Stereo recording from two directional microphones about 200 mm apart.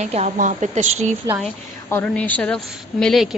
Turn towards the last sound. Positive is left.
turn(degrees=0)  # may be behind; listen again after turning